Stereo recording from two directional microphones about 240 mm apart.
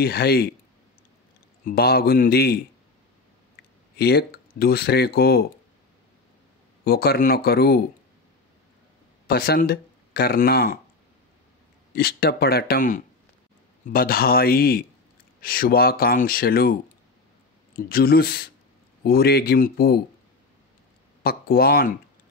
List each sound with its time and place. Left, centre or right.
0.0 s speech: left
1.7 s speech: left
3.9 s speech: left
6.8 s speech: left
9.3 s speech: left
11.9 s speech: left
17.7 s speech: left
21.2 s speech: left